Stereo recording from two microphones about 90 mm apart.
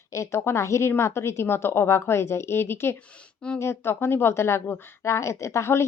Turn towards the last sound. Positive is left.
turn(degrees=30)  # may be behind; listen again after turning